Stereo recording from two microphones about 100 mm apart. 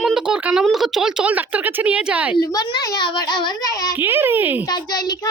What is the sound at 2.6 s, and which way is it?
A child's voice, 40° left (ahead or behind).